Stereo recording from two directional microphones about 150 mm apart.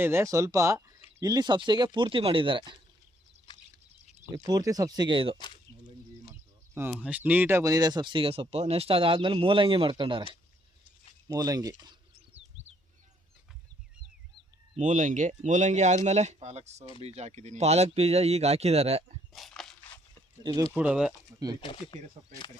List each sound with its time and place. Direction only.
0.0 s speech: 15° right (ahead or behind)
3.5 s a sound: 30° left (ahead or behind)
4.4 s speech: 25° right (ahead or behind)
6.7 s speech: 10° right (ahead or behind); by 10.2 s 35° right (ahead or behind)
11.3 s speech: 25° right (ahead or behind)
14.8 s speech: 55° right (ahead or behind)
19.3 s a sound: centre (ahead or behind)
20.7 s speech: 5° right (ahead or behind)
21.3 s speech: 25° right (ahead or behind)
21.6 s speech: 35° left (ahead or behind)